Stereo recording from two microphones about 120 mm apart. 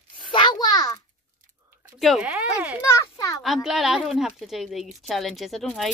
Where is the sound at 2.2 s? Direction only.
10° right (ahead or behind).